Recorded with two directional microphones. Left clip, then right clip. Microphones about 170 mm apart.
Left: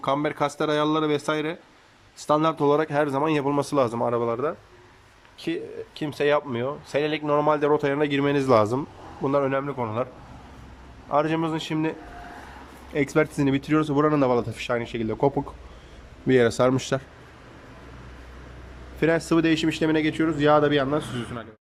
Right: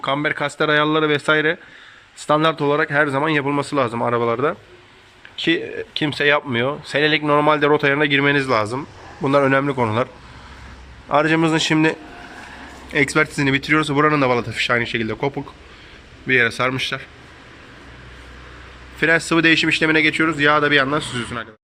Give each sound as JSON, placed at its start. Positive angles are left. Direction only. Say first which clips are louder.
{"t": 0.0, "sound": "speech", "louder": "right 4 dB", "side_deg": 15}
{"t": 3.9, "sound": "speech", "louder": "right 5 dB", "side_deg": 10}
{"t": 9.2, "sound": "a man's voice", "louder": "right 7 dB", "side_deg": 5}
{"t": 11.1, "sound": "a man's voice", "louder": "right 7 dB", "side_deg": 10}
{"t": 16.2, "sound": "speech", "louder": "right 3 dB", "side_deg": 25}
{"t": 18.9, "sound": "speech", "louder": "right 5 dB", "side_deg": 15}